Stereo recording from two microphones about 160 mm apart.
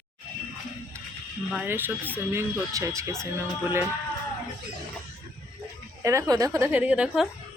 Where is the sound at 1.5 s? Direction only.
10° right (ahead or behind).